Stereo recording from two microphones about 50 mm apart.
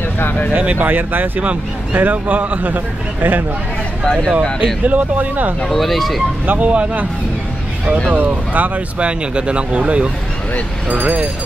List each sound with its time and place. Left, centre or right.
0.2 s speech: left
0.6 s a man's voice: right
4.0 s speech: centre
4.8 s a man's voice: right
5.7 s speech: centre
6.4 s a man's voice: right
6.7 s speech: right
8.1 s a man's voice: right